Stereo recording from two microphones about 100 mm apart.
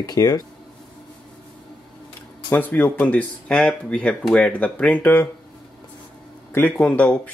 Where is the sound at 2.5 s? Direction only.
20° left (ahead or behind).